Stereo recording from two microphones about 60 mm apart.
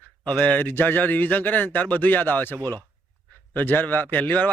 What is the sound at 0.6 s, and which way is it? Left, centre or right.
Speech, left.